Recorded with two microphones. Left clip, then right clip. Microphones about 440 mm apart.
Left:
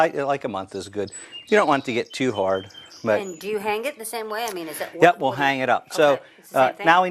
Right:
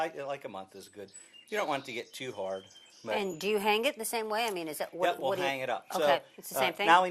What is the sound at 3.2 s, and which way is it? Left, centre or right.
Speech, right.